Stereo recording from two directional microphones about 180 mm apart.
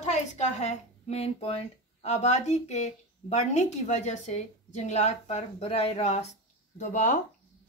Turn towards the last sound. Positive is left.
turn(degrees=45)  # may be behind; listen again after turning